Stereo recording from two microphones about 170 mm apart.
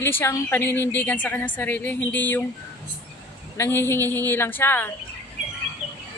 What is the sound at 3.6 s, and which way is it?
A woman's voice, 15° left (ahead or behind).